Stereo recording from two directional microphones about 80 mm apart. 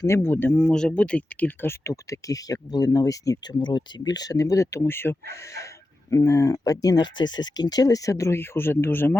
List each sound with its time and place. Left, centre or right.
0.0 s speech: left
0.6 s speech: centre; by 3.4 s left
3.4 s speech: left